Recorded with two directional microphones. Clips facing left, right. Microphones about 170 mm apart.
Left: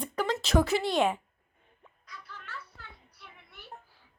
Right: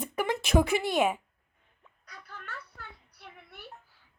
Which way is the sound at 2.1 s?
50° right (ahead or behind).